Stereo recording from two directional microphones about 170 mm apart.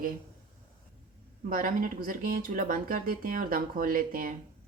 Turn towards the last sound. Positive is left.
turn(degrees=-55)  # may be behind; listen again after turning